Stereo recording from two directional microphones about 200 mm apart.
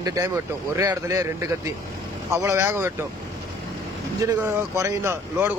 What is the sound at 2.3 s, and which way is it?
Speech, 15° right (ahead or behind).